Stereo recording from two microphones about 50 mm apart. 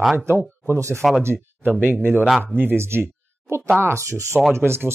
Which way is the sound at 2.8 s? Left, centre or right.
Right.